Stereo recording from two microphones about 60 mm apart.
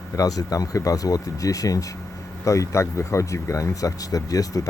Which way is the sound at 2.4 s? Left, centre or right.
Left.